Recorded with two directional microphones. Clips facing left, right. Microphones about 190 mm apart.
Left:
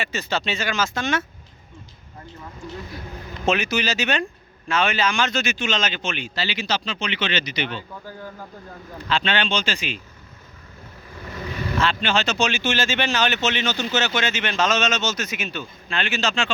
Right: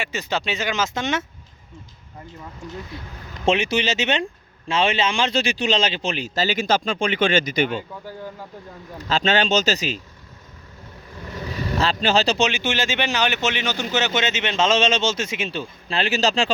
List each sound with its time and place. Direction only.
0.0 s speech: 15° right (ahead or behind)
2.9 s speech: 25° right (ahead or behind); by 7.9 s 45° right (ahead or behind)
9.0 s speech: 40° right (ahead or behind)
11.8 s speech: 35° right (ahead or behind)
12.4 s speech: 15° right (ahead or behind); by 16.5 s 35° right (ahead or behind)